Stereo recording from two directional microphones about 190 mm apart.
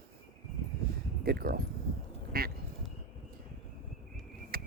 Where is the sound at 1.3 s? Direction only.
55° right (ahead or behind).